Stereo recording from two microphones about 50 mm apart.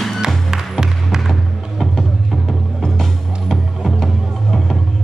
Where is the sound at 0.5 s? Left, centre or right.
Centre.